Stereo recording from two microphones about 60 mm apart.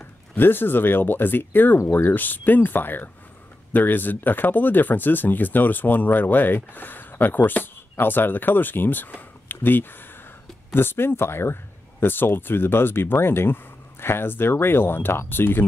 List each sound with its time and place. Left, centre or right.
0.0 s speech: left